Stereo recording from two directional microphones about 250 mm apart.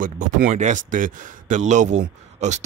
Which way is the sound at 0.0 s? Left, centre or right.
Right.